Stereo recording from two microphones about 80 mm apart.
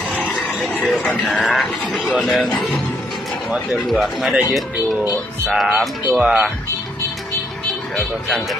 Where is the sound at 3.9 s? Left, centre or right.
Centre.